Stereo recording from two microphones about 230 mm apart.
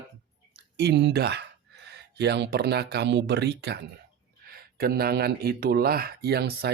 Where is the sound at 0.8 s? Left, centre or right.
Right.